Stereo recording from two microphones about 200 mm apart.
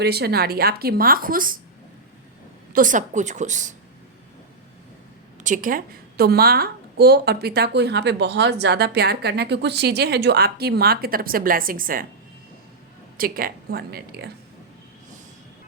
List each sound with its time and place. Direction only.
0.0 s a woman's voice: 55° right (ahead or behind)
2.7 s a woman's voice: 40° right (ahead or behind)
5.4 s a woman's voice: 40° right (ahead or behind)
13.1 s a woman's voice: 45° right (ahead or behind)